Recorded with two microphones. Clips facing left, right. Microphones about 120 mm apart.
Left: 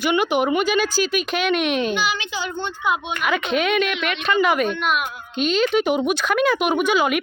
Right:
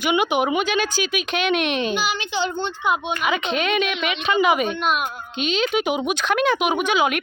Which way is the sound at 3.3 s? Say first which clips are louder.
Left 3 dB; 5° left (ahead or behind).